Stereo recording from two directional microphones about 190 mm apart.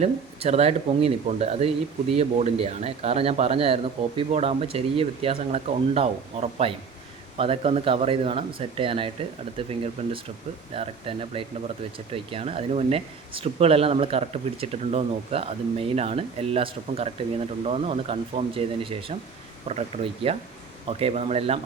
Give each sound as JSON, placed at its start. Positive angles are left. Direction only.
{"t": 0.0, "sound": "speech", "side_deg": -35}